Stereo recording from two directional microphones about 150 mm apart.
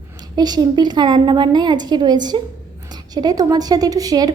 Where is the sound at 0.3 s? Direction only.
25° right (ahead or behind).